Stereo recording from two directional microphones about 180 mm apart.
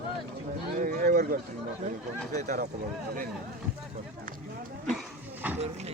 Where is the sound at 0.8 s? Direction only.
50° right (ahead or behind).